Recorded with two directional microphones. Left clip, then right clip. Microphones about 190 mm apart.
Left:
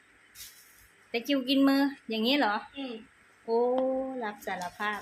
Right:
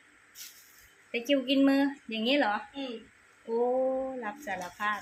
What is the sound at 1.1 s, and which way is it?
Speech, 25° left (ahead or behind).